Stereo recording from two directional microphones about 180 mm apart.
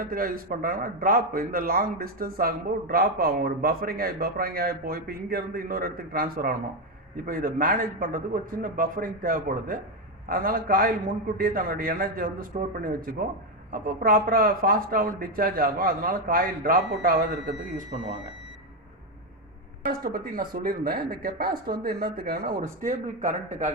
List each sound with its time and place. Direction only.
0.0 s a man's voice: 55° right (ahead or behind)
19.8 s speech: 55° right (ahead or behind)